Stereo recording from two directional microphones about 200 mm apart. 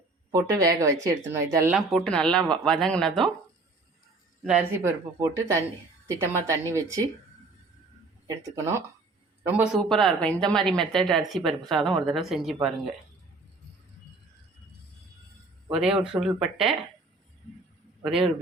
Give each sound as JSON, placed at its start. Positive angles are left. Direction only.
{"t": 0.3, "sound": "speech", "side_deg": -20}
{"t": 1.7, "sound": "speech", "side_deg": 0}
{"t": 4.4, "sound": "speech", "side_deg": -10}
{"t": 8.3, "sound": "speech", "side_deg": -15}
{"t": 9.9, "sound": "speech", "side_deg": 0}
{"t": 15.7, "sound": "speech", "side_deg": -5}